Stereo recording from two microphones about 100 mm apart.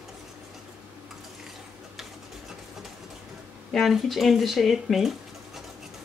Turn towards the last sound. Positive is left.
turn(degrees=0)  # may be behind; listen again after turning